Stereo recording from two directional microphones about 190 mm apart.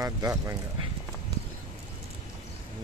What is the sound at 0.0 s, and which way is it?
Speech, 15° right (ahead or behind).